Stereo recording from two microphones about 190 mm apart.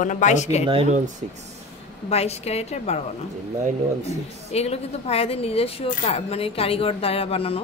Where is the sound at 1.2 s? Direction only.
35° right (ahead or behind).